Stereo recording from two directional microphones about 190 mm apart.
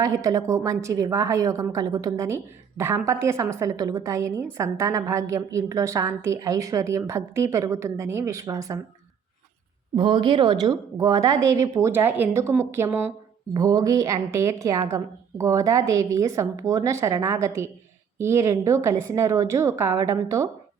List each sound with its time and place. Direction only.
0.0 s a woman's voice: 15° right (ahead or behind)
9.9 s a woman's voice: 25° right (ahead or behind)